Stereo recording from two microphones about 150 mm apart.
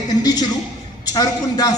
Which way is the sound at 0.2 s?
25° left (ahead or behind).